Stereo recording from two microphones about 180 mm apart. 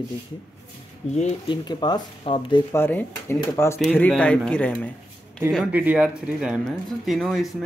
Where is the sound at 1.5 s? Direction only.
25° left (ahead or behind).